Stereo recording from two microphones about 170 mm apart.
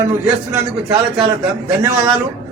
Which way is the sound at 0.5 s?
10° right (ahead or behind).